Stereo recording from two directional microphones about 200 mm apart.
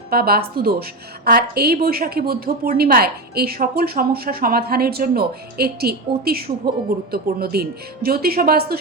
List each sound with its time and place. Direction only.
0.1 s a woman's voice: 50° right (ahead or behind)